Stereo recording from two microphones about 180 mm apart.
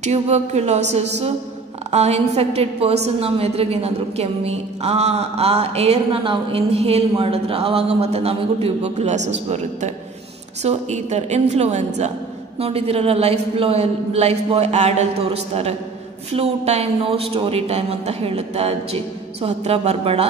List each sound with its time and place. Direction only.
0.0 s a woman's voice: 40° right (ahead or behind)